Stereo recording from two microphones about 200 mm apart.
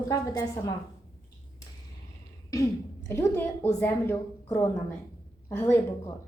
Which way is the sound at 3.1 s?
10° left (ahead or behind).